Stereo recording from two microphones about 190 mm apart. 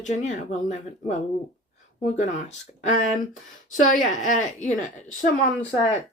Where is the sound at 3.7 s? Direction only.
40° left (ahead or behind).